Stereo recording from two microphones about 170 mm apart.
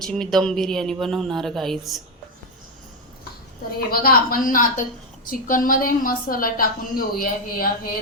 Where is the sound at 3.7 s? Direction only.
60° left (ahead or behind).